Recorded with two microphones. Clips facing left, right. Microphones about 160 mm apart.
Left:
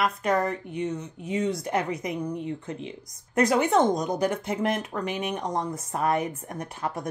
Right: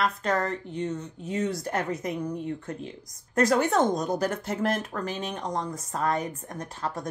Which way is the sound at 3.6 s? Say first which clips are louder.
Left 2 dB; 20° left (ahead or behind).